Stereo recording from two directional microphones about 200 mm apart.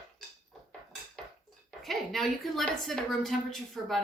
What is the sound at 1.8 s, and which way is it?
A woman's voice, centre (ahead or behind).